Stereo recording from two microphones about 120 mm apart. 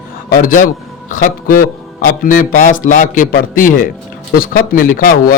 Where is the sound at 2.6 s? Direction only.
90° left.